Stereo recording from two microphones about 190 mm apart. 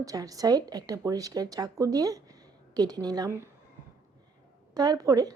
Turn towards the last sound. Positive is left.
turn(degrees=-20)  # may be behind; listen again after turning